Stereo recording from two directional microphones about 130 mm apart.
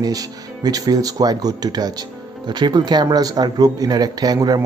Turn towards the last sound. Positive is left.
turn(degrees=-30)  # may be behind; listen again after turning